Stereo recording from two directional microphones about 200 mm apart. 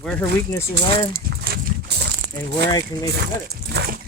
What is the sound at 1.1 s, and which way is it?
Dog, 55° right (ahead or behind).